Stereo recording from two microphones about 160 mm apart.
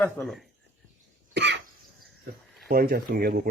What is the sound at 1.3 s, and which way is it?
Cough, 90° right.